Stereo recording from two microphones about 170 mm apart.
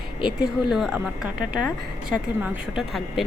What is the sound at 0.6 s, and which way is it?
Speech, centre (ahead or behind).